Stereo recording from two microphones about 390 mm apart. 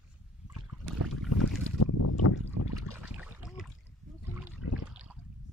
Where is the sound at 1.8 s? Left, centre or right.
Left.